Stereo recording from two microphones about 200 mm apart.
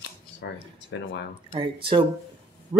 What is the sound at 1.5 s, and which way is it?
Speech, 25° right (ahead or behind).